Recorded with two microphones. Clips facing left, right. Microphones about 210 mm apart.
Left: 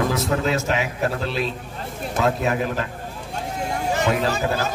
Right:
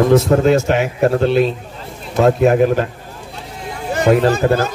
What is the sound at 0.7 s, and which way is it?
A man's voice, 60° right (ahead or behind).